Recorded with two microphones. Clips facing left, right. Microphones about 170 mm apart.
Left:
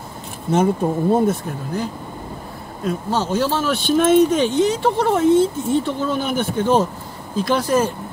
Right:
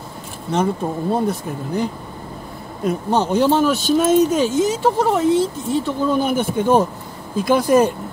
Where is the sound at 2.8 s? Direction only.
15° right (ahead or behind).